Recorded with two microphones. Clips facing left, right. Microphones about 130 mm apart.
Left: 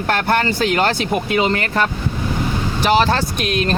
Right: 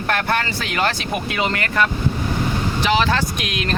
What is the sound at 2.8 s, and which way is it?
Speech, 40° left (ahead or behind).